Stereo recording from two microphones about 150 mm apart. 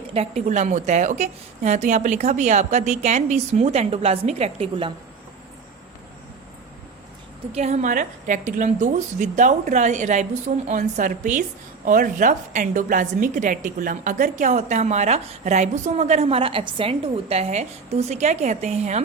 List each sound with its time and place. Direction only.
0.1 s a woman's voice: 45° right (ahead or behind)
7.5 s a woman's voice: 50° right (ahead or behind)